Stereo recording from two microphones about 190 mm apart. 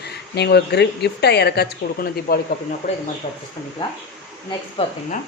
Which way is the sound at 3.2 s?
35° left (ahead or behind).